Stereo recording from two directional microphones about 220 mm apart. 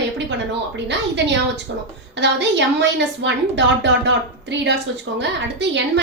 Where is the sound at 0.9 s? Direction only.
50° right (ahead or behind).